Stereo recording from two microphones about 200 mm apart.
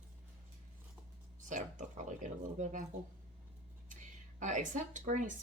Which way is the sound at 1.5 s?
40° right (ahead or behind).